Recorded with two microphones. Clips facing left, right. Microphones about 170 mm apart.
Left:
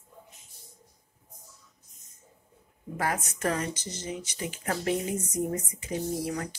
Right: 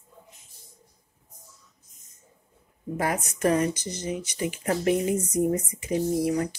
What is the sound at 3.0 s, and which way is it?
Speech, 15° right (ahead or behind).